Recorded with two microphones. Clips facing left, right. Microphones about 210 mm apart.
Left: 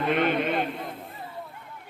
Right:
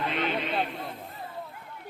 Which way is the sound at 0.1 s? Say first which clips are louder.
Left 6 dB; 50° left (ahead or behind).